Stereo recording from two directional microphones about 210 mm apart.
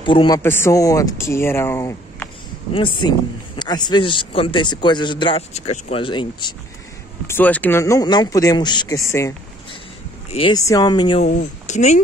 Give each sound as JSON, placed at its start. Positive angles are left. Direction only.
{"t": 0.0, "sound": "speech", "side_deg": 25}
{"t": 0.4, "sound": "speech", "side_deg": 10}
{"t": 2.7, "sound": "speech", "side_deg": 25}
{"t": 7.2, "sound": "speech", "side_deg": 10}
{"t": 10.3, "sound": "speech", "side_deg": 20}
{"t": 11.2, "sound": "speech", "side_deg": 35}